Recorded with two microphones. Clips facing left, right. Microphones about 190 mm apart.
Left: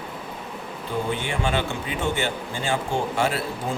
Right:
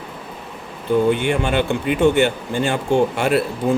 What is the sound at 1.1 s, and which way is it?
Speech, 65° right (ahead or behind).